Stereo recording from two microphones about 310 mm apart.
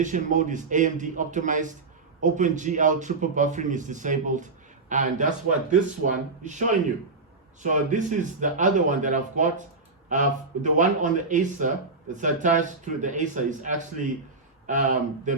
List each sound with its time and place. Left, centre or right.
0.0 s speech: right